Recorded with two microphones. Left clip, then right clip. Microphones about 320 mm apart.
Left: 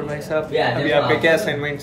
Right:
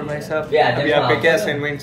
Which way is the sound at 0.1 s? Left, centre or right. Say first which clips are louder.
Right 3 dB; centre.